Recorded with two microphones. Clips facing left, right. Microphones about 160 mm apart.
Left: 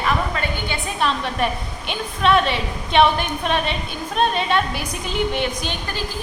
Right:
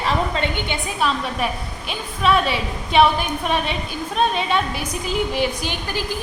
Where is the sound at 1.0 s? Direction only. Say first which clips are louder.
Left 1 dB; 5° right (ahead or behind).